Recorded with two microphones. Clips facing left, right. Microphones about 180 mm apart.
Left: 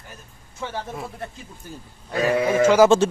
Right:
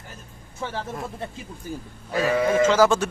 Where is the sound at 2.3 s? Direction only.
10° left (ahead or behind).